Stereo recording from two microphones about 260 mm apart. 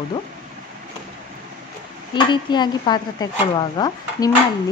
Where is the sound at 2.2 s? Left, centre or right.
Centre.